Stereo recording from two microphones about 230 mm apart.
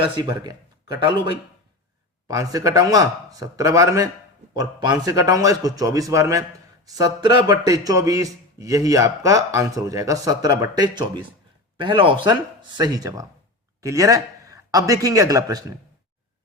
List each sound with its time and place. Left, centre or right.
0.0 s a man's voice: right